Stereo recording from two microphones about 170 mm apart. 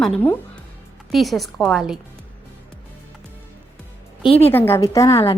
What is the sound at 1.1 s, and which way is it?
Speech, centre (ahead or behind).